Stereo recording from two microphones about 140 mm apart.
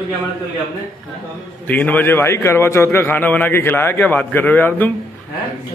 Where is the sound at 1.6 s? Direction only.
10° left (ahead or behind).